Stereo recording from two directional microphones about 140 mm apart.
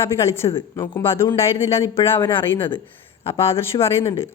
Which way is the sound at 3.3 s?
20° left (ahead or behind).